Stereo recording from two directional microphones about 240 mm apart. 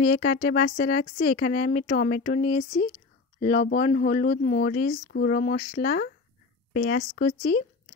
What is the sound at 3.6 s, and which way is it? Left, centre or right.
Speech, left.